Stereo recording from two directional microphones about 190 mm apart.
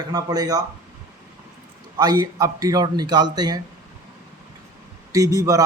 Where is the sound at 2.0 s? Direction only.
20° right (ahead or behind).